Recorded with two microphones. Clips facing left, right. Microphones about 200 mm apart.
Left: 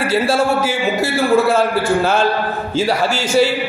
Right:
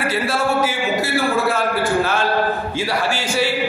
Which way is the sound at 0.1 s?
30° left (ahead or behind).